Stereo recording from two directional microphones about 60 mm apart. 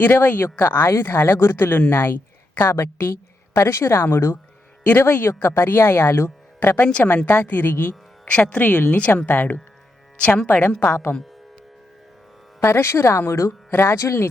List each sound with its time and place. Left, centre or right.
0.0 s speech: left
0.9 s a woman's voice: left
6.8 s a woman's voice: centre
7.3 s a woman's voice: left
10.8 s speech: left
12.6 s speech: left
13.7 s speech: left
13.9 s speech: left